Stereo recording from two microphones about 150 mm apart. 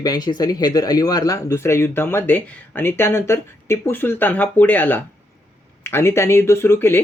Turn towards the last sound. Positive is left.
turn(degrees=15)  # may be behind; listen again after turning